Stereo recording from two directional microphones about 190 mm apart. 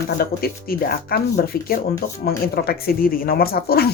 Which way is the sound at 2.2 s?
55° left (ahead or behind).